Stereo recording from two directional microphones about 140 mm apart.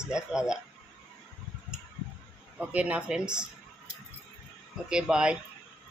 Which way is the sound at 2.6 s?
10° right (ahead or behind).